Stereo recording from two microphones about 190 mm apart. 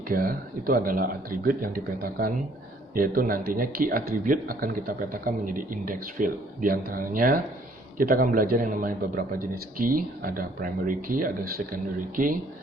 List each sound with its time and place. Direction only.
0.1 s speech: 50° right (ahead or behind)